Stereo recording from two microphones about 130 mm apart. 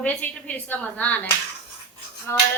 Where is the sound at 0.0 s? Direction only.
10° left (ahead or behind).